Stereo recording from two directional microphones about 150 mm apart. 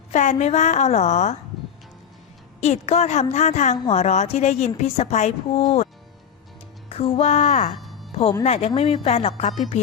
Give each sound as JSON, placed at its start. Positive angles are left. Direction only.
{"t": 0.1, "sound": "a woman's voice", "side_deg": 50}
{"t": 2.6, "sound": "a woman's voice", "side_deg": 45}
{"t": 6.9, "sound": "a woman's voice", "side_deg": 45}
{"t": 8.1, "sound": "a woman's voice", "side_deg": 40}